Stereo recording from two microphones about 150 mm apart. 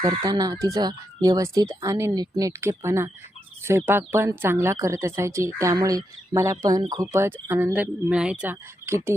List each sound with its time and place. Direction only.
0.2 s speech: 25° right (ahead or behind); by 9.0 s 10° right (ahead or behind)